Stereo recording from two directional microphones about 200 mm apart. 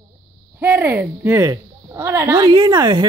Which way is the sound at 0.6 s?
10° right (ahead or behind).